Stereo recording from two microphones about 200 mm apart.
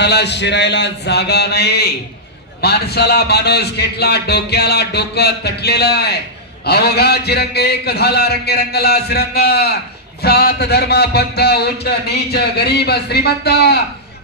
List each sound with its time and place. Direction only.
0.0 s a man's voice: 60° left (ahead or behind)